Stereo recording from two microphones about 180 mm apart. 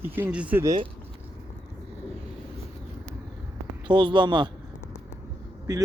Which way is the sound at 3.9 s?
25° right (ahead or behind).